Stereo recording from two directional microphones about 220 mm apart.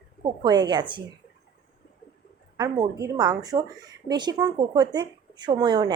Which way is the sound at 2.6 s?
15° right (ahead or behind).